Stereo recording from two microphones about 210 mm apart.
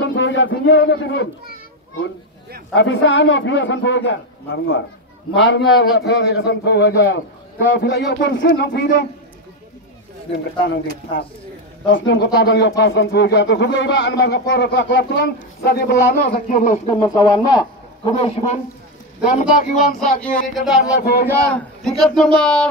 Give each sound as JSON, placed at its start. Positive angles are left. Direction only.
{"t": 0.0, "sound": "speech", "side_deg": 60}
{"t": 2.7, "sound": "speech", "side_deg": 60}
{"t": 5.3, "sound": "a man's voice", "side_deg": 60}
{"t": 10.3, "sound": "a man's voice", "side_deg": 55}
{"t": 16.8, "sound": "a man's voice", "side_deg": 15}
{"t": 20.5, "sound": "speech", "side_deg": 0}
{"t": 21.0, "sound": "a man's voice", "side_deg": 45}
{"t": 21.3, "sound": "speech", "side_deg": 5}